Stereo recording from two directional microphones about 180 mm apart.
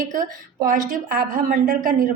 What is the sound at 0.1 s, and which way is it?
A woman's voice, 50° right (ahead or behind).